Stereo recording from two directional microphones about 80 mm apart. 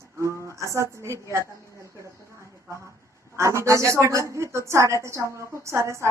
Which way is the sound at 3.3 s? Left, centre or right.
Right.